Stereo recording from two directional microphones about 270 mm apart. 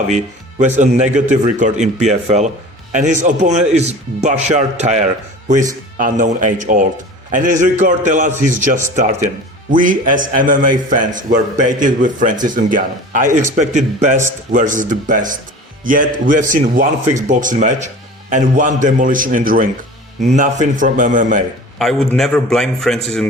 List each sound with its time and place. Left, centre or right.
0.6 s a man's voice: right
21.8 s a man's voice: centre